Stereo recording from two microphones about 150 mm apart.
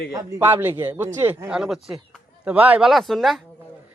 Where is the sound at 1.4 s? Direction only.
5° right (ahead or behind).